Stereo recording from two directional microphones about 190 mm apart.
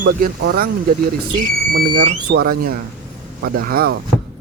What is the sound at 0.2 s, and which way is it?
Speech, 55° right (ahead or behind).